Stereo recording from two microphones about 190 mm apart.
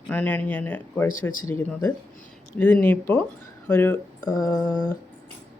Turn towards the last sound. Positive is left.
turn(degrees=20)  # may be behind; listen again after turning